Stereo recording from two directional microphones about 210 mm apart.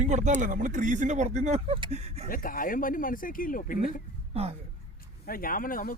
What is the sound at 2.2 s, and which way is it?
Speech, 40° left (ahead or behind).